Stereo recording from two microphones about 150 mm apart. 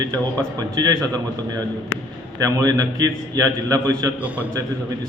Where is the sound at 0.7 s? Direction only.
25° right (ahead or behind).